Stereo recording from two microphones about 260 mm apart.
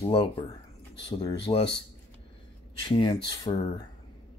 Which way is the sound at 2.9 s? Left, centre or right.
Centre.